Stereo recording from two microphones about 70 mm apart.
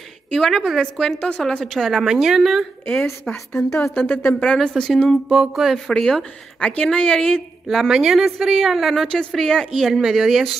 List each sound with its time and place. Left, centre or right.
0.3 s a woman's voice: centre
3.3 s a woman's voice: left
3.9 s speech: left
4.6 s speech: centre
5.3 s a woman's voice: centre
5.9 s speech: centre
7.6 s a woman's voice: centre